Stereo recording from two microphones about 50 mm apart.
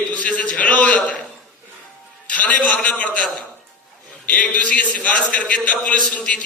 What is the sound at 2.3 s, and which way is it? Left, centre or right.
Speech, left.